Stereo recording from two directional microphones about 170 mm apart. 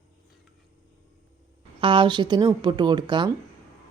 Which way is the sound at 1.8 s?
30° right (ahead or behind).